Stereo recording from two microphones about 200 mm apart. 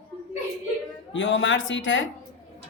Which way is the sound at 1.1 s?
70° left (ahead or behind).